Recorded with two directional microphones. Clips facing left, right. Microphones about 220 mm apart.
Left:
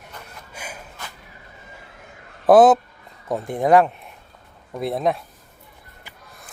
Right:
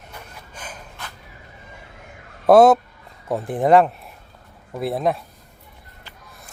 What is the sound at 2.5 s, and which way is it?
A man's voice, centre (ahead or behind).